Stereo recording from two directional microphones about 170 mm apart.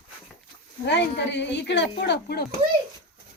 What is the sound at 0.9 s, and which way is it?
Speech, 90° left.